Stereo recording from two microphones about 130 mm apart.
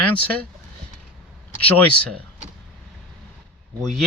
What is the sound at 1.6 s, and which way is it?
Speech, 10° left (ahead or behind).